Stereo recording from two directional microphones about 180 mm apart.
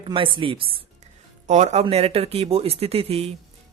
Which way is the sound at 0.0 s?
30° right (ahead or behind).